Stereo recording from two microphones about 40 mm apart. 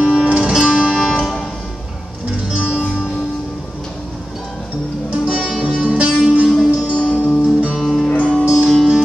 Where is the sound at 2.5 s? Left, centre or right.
Centre.